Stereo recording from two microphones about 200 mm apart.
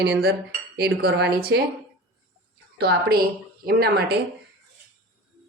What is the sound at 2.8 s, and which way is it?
Speech, 50° right (ahead or behind).